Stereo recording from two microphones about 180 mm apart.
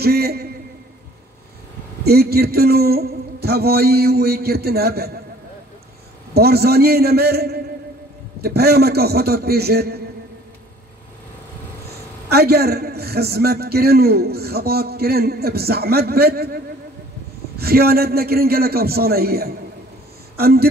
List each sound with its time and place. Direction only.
0.0 s a man's voice: 60° right (ahead or behind)
2.0 s a man's voice: 60° right (ahead or behind)
6.3 s a man's voice: 60° right (ahead or behind)
12.3 s a man's voice: 60° right (ahead or behind)
17.6 s a man's voice: 60° right (ahead or behind)